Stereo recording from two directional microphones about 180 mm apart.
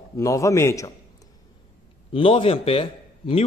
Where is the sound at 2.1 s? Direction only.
30° left (ahead or behind).